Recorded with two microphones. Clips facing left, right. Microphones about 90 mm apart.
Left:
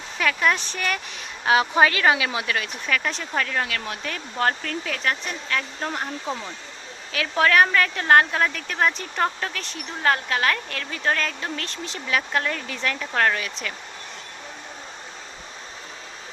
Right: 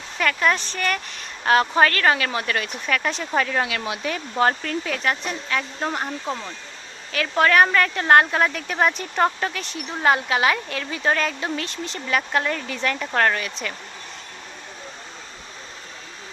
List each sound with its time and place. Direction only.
0.2 s a woman's voice: centre (ahead or behind)